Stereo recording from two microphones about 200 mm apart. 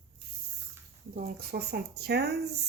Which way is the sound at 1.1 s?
50° right (ahead or behind).